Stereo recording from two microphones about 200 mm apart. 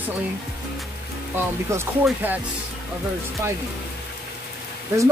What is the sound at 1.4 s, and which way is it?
Speech, 10° right (ahead or behind).